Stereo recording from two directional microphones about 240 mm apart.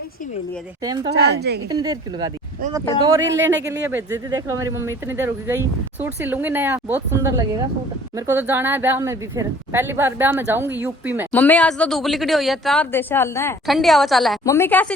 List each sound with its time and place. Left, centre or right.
1.7 s speech: centre
11.3 s speech: centre
13.7 s speech: centre
14.4 s a woman's voice: centre